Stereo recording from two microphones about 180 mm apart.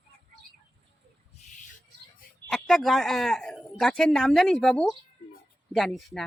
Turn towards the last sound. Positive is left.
turn(degrees=0)  # may be behind; listen again after turning